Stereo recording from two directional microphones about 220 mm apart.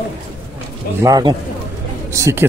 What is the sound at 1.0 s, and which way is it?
Speech, 15° right (ahead or behind).